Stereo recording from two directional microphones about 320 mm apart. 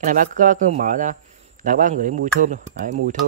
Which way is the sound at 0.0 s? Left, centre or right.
Right.